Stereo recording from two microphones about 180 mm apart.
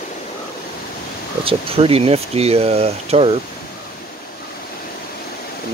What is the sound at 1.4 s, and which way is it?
Speech, 30° right (ahead or behind).